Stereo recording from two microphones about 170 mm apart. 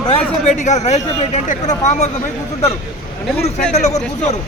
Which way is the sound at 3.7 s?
40° left (ahead or behind).